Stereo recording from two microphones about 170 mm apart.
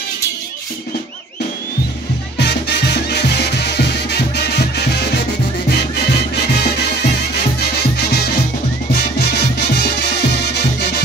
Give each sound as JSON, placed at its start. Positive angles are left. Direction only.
{"t": 2.3, "sound": "music", "side_deg": 80}
{"t": 6.3, "sound": "music", "side_deg": 75}